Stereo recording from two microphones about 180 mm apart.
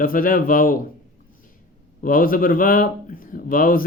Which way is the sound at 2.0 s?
50° left (ahead or behind).